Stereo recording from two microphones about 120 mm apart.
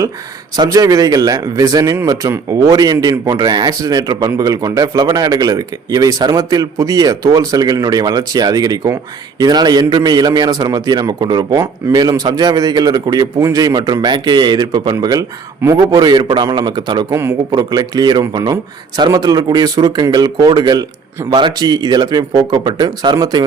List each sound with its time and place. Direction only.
0.5 s speech: 30° right (ahead or behind)
17.1 s speech: 20° right (ahead or behind)
17.5 s speech: 35° right (ahead or behind)